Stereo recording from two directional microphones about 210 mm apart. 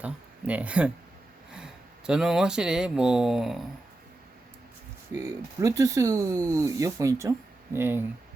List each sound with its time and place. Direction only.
0.0 s speech: 5° right (ahead or behind)
5.1 s speech: 15° right (ahead or behind)